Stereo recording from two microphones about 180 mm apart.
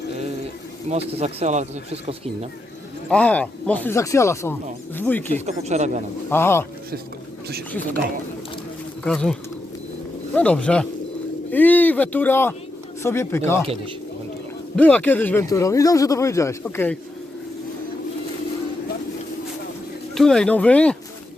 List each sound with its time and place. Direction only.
0.9 s speech: 35° right (ahead or behind)
3.1 s speech: 5° left (ahead or behind)
5.5 s speech: 40° right (ahead or behind)
6.3 s speech: 15° left (ahead or behind)
9.0 s speech: 5° left (ahead or behind)
14.8 s speech: 10° left (ahead or behind)
20.1 s speech: 5° left (ahead or behind)